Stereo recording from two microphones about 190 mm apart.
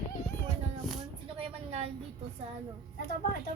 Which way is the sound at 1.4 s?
35° right (ahead or behind).